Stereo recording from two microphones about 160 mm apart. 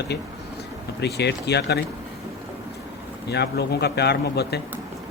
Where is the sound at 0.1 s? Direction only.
90° left.